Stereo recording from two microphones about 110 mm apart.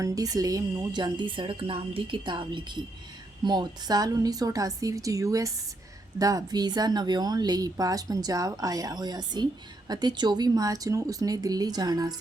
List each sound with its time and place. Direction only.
0.0 s a woman's voice: 30° right (ahead or behind)